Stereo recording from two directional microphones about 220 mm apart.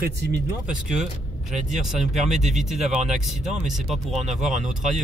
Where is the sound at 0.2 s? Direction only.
50° right (ahead or behind).